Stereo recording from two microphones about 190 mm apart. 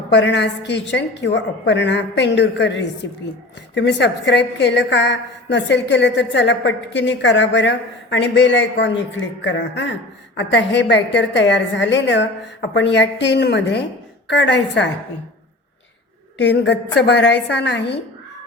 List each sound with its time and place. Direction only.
0.1 s a woman's voice: 70° left (ahead or behind)
16.4 s a woman's voice: 65° left (ahead or behind)